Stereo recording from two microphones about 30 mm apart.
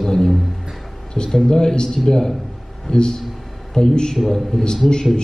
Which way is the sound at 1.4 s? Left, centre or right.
Left.